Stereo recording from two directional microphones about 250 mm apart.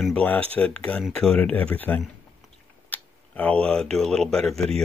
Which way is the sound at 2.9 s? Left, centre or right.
Centre.